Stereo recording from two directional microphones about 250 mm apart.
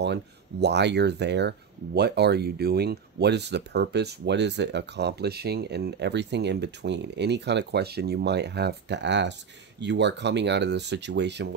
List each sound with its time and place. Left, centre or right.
0.0 s speech: right